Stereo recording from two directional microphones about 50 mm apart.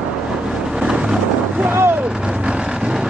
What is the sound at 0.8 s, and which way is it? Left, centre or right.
Roaring cats, centre.